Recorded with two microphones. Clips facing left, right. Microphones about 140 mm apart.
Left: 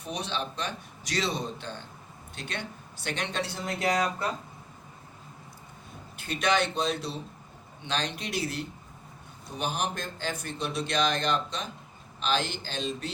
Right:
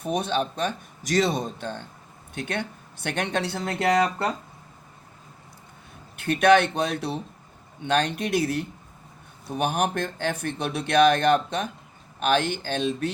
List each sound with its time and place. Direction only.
0.0 s a man's voice: 50° right (ahead or behind); by 4.3 s 65° right (ahead or behind)
6.1 s a man's voice: 55° right (ahead or behind)